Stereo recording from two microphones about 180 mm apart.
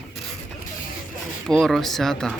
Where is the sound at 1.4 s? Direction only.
Centre (ahead or behind).